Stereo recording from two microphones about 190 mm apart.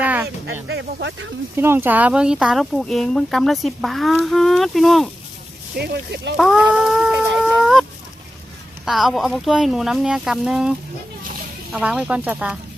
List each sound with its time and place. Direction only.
0.0 s a sound: 10° right (ahead or behind)
0.7 s speech: 65° right (ahead or behind)
1.5 s speech: 10° right (ahead or behind)
5.7 s speech: 60° right (ahead or behind)
6.3 s a sound: centre (ahead or behind)
8.8 s speech: centre (ahead or behind)